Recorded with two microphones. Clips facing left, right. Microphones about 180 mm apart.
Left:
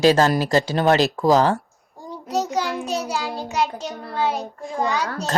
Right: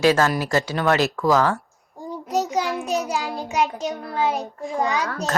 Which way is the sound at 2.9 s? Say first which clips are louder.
Right 2 dB; centre (ahead or behind).